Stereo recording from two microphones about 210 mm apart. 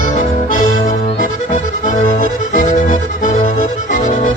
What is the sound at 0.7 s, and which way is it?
Accordion, 35° left (ahead or behind).